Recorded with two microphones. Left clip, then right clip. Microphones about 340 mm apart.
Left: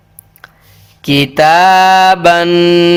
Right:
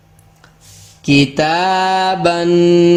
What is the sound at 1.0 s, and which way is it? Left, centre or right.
Mantra, left.